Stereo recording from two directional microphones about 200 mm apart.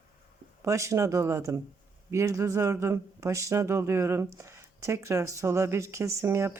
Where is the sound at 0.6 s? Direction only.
15° right (ahead or behind).